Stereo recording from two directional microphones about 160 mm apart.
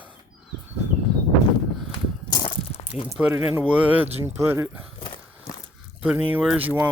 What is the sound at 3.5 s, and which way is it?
Speech, 10° right (ahead or behind).